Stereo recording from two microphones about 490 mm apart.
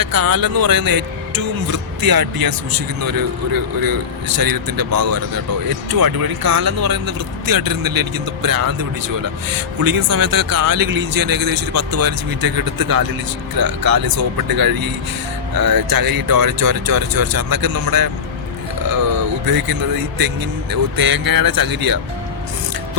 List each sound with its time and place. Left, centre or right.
0.0 s a man's voice: right